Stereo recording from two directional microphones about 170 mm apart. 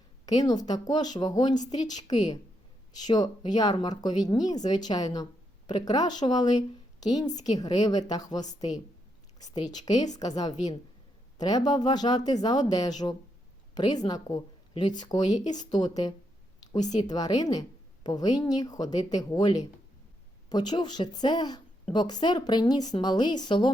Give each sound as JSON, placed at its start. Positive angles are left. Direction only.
{"t": 0.3, "sound": "speech", "side_deg": 25}
{"t": 1.5, "sound": "a woman's voice", "side_deg": 45}
{"t": 3.1, "sound": "speech", "side_deg": 25}
{"t": 15.3, "sound": "a woman's voice", "side_deg": 45}
{"t": 15.7, "sound": "speech", "side_deg": 25}